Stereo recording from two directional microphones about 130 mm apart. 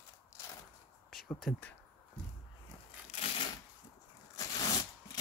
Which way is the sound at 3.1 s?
50° left (ahead or behind).